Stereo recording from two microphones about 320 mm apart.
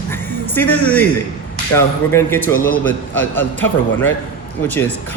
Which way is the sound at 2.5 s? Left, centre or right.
Left.